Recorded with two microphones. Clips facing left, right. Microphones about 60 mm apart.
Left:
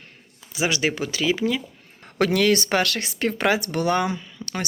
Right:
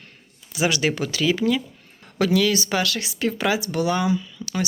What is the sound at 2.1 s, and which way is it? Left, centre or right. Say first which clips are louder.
Speech: left 1 dB; left.